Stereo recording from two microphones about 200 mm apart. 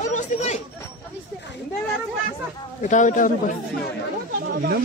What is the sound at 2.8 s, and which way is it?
Speech, 40° left (ahead or behind).